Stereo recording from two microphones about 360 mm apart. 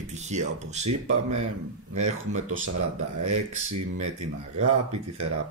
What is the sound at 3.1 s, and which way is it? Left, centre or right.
Speech, right.